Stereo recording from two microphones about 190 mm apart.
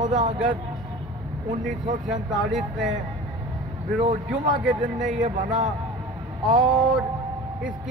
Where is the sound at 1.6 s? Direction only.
40° right (ahead or behind).